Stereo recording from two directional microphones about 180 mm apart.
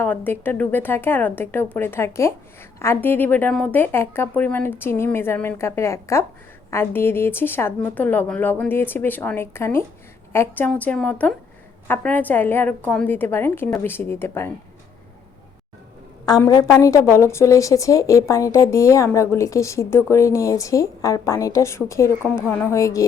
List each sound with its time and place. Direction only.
0.0 s speech: 10° left (ahead or behind)
16.4 s speech: 20° left (ahead or behind)